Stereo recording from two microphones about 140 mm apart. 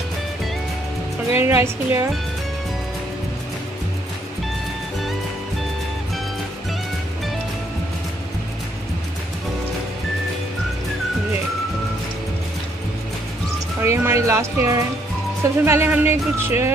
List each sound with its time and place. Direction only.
1.3 s speech: 15° right (ahead or behind)
13.8 s speech: 20° right (ahead or behind)